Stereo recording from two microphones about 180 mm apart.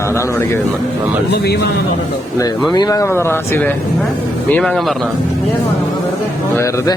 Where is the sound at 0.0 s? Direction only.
15° left (ahead or behind).